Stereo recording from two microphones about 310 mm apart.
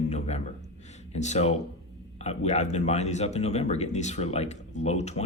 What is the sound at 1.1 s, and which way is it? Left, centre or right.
Speech, left.